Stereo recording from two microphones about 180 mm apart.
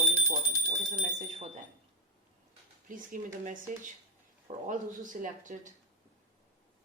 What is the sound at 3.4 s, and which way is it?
Speech, 45° right (ahead or behind).